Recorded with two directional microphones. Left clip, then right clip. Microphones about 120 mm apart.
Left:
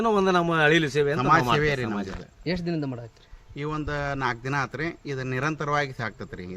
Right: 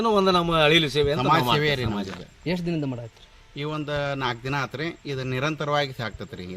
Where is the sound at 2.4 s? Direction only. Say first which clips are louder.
Right 1 dB; 70° right (ahead or behind).